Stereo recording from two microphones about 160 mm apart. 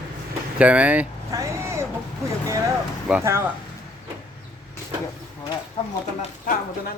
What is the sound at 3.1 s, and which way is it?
Speech, 15° right (ahead or behind).